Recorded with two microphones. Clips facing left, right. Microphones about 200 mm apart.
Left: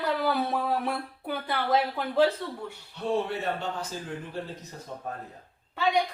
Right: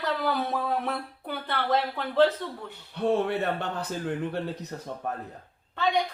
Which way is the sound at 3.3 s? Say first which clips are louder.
Right 3 dB; 60° right (ahead or behind).